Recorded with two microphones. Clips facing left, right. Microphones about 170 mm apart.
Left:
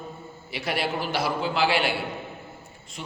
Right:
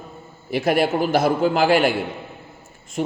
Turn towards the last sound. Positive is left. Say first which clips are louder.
# right 14 dB
turn(degrees=-45)  # may be behind; listen again after turning